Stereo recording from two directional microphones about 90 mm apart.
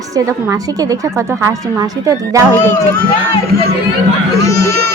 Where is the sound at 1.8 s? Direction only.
40° right (ahead or behind).